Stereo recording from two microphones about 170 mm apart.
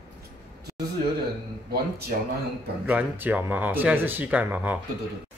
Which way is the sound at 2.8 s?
10° right (ahead or behind).